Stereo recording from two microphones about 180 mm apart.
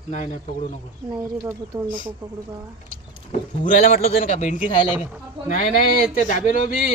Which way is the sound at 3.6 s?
50° left (ahead or behind).